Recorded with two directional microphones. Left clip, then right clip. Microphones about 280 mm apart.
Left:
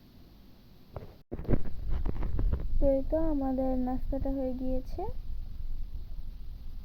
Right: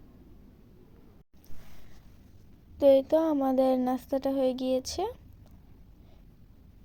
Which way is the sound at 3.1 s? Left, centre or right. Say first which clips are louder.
Right 6 dB; right.